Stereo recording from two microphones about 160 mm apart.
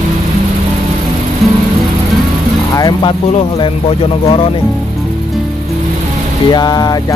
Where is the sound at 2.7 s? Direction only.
25° left (ahead or behind).